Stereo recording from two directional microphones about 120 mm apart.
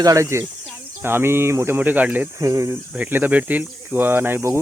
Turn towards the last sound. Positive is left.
turn(degrees=-20)  # may be behind; listen again after turning